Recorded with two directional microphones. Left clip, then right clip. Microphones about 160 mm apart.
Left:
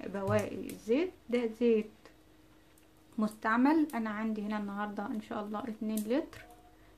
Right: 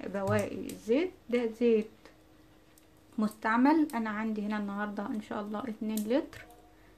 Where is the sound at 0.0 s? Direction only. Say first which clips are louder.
Right 1 dB; 5° right (ahead or behind).